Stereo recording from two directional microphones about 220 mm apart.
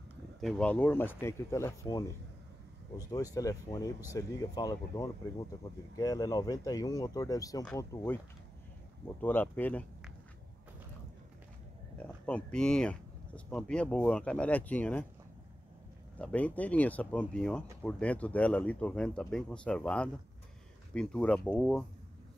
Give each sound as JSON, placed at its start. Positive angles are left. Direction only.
{"t": 0.4, "sound": "speech", "side_deg": 5}
{"t": 3.3, "sound": "speech", "side_deg": 15}
{"t": 12.0, "sound": "speech", "side_deg": 5}
{"t": 16.2, "sound": "speech", "side_deg": 5}